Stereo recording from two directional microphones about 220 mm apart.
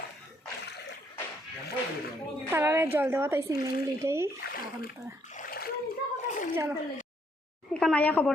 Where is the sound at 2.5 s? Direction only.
10° right (ahead or behind).